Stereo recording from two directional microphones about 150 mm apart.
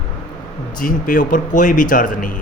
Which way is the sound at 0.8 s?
65° left (ahead or behind).